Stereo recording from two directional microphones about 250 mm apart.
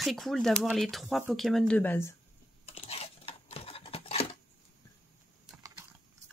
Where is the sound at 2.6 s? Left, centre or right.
Left.